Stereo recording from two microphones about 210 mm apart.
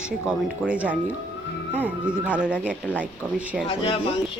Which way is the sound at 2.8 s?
5° left (ahead or behind).